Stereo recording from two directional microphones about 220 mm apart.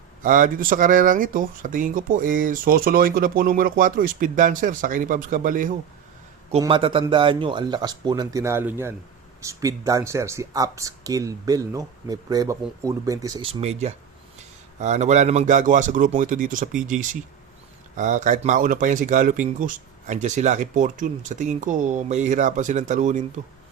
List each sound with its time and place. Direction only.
0.2 s speech: 35° right (ahead or behind)
6.6 s speech: 25° right (ahead or behind)
13.5 s speech: 30° right (ahead or behind)